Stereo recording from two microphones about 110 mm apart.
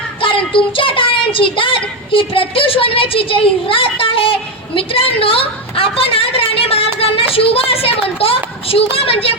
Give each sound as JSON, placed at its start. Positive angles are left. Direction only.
{"t": 0.2, "sound": "a child's voice", "side_deg": 50}